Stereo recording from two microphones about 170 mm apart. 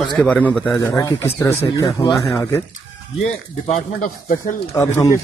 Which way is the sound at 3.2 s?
45° left (ahead or behind).